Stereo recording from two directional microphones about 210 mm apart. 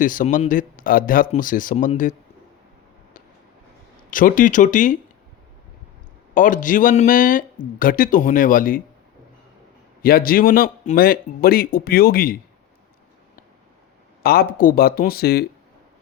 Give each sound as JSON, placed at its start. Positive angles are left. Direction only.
{"t": 0.0, "sound": "speech", "side_deg": 40}
{"t": 4.1, "sound": "speech", "side_deg": 40}
{"t": 6.3, "sound": "speech", "side_deg": 40}
{"t": 10.0, "sound": "a man's voice", "side_deg": 45}
{"t": 14.2, "sound": "a man's voice", "side_deg": 45}